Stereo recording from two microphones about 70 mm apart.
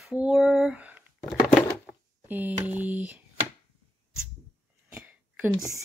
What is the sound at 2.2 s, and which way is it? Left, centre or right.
Speech, right.